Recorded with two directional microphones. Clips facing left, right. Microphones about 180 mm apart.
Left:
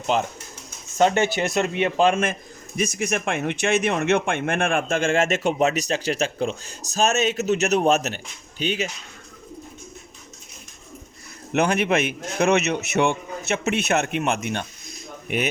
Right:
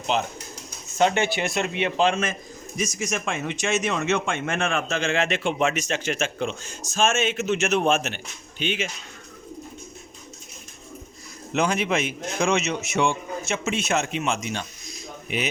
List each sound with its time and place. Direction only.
0.1 s speech: 45° left (ahead or behind)
2.7 s speech: 60° left (ahead or behind); by 8.9 s 40° left (ahead or behind)
11.5 s a man's voice: 60° left (ahead or behind)